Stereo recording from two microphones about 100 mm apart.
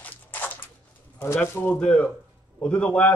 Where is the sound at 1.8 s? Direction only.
5° left (ahead or behind).